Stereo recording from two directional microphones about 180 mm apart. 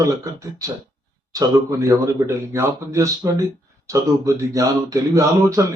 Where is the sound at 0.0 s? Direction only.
15° right (ahead or behind).